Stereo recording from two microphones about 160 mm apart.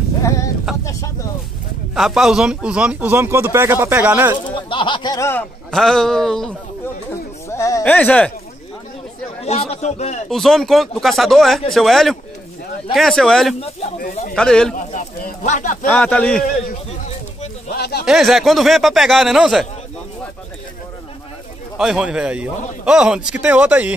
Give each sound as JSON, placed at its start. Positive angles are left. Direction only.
{"t": 0.7, "sound": "a sound", "side_deg": -5}
{"t": 2.0, "sound": "speech", "side_deg": 0}
{"t": 4.5, "sound": "speech", "side_deg": 30}
{"t": 5.7, "sound": "a man's voice", "side_deg": 5}
{"t": 7.4, "sound": "speech", "side_deg": 20}
{"t": 9.4, "sound": "speech", "side_deg": 40}
{"t": 10.3, "sound": "a man's voice", "side_deg": 0}
{"t": 13.6, "sound": "speech", "side_deg": 40}
{"t": 14.3, "sound": "a man's voice", "side_deg": 5}
{"t": 14.9, "sound": "speech", "side_deg": 50}
{"t": 15.9, "sound": "speech", "side_deg": 10}
{"t": 17.6, "sound": "a sound", "side_deg": 85}
{"t": 18.0, "sound": "a man's voice", "side_deg": 0}
{"t": 21.7, "sound": "speech", "side_deg": -5}